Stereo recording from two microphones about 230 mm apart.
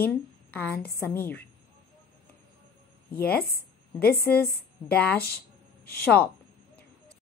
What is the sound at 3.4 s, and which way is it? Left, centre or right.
Speech, left.